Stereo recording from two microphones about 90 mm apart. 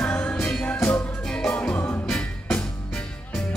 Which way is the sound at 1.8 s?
25° left (ahead or behind).